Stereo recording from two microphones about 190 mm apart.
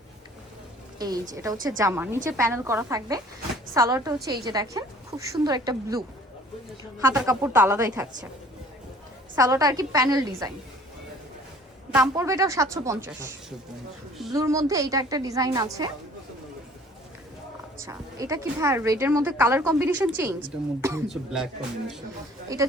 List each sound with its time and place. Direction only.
0.9 s a woman's voice: 20° right (ahead or behind)
7.3 s a woman's voice: 10° right (ahead or behind)
9.3 s a woman's voice: 20° right (ahead or behind)
11.9 s a woman's voice: 15° right (ahead or behind)
14.3 s a woman's voice: 15° right (ahead or behind)
17.7 s a woman's voice: 15° right (ahead or behind)
21.1 s speech: centre (ahead or behind)
22.5 s a woman's voice: 15° right (ahead or behind)